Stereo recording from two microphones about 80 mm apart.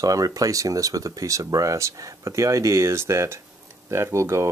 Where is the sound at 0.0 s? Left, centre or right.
Right.